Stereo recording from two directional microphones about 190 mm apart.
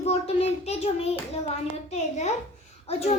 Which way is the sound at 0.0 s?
35° left (ahead or behind).